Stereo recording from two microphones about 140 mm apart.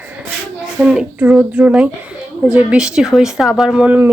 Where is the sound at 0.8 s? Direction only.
5° right (ahead or behind).